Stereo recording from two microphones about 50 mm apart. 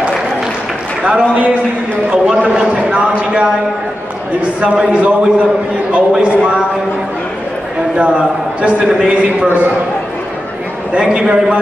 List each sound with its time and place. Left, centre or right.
1.0 s a man's voice: right
2.7 s a sound: right
4.7 s a man's voice: right
8.0 s a man's voice: right
11.0 s a man's voice: centre